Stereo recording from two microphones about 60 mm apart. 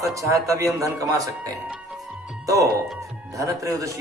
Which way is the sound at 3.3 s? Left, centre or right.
Right.